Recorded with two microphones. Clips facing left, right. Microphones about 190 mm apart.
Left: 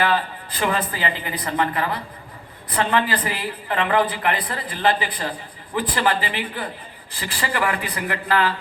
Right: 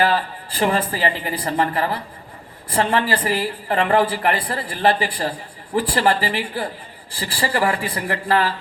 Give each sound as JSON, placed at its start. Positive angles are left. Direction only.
{"t": 0.0, "sound": "speech", "side_deg": -30}